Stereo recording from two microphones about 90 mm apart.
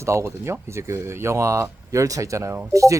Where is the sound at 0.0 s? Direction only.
35° right (ahead or behind).